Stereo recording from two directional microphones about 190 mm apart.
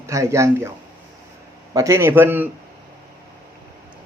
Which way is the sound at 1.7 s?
15° right (ahead or behind).